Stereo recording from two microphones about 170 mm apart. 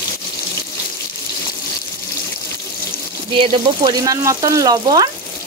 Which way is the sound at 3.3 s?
30° right (ahead or behind).